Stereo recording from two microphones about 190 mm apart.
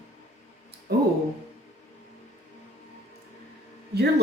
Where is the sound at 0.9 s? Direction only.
60° right (ahead or behind).